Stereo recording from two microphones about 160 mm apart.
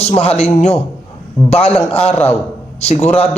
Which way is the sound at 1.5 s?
40° left (ahead or behind).